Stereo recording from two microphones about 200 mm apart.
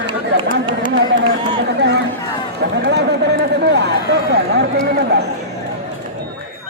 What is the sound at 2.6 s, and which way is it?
Chatter, 60° right (ahead or behind).